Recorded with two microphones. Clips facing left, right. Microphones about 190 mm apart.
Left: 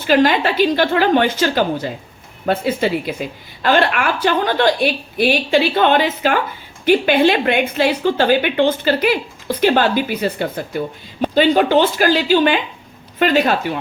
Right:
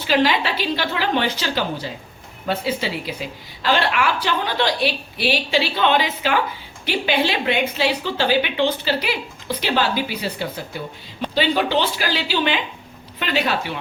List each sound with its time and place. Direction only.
0.0 s a woman's voice: 50° left (ahead or behind)